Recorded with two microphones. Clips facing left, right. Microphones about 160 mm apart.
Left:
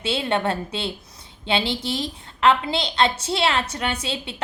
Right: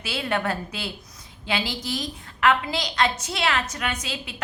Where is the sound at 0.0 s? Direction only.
25° left (ahead or behind).